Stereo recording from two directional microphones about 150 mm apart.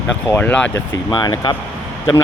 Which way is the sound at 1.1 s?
25° left (ahead or behind).